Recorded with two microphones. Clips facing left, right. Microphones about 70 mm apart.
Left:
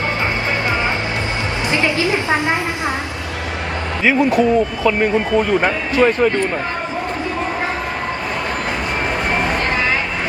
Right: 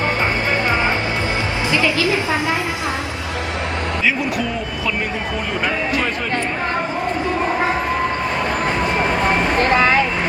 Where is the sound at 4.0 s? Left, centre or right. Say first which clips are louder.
Left 8 dB; left.